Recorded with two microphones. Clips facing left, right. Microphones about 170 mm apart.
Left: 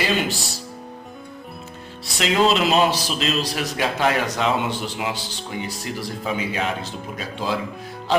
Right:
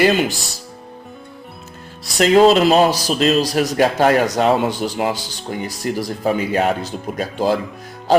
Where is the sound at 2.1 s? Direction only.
45° right (ahead or behind).